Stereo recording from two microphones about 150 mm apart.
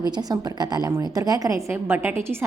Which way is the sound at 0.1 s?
25° right (ahead or behind).